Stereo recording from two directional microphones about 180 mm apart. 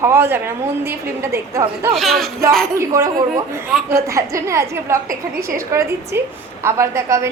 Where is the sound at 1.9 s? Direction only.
Centre (ahead or behind).